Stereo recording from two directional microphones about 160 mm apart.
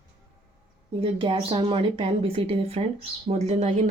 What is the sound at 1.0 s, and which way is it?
Speech, 35° right (ahead or behind).